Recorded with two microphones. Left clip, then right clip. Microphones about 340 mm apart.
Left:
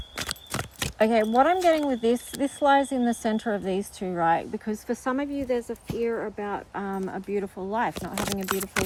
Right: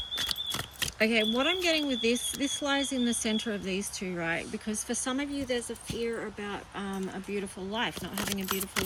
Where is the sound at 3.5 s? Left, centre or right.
Left.